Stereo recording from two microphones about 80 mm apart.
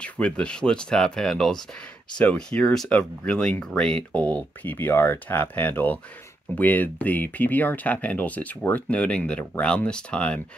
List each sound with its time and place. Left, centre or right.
0.0 s speech: centre